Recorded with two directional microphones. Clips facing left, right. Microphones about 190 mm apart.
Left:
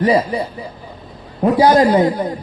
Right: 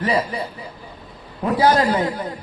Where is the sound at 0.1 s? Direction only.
30° left (ahead or behind).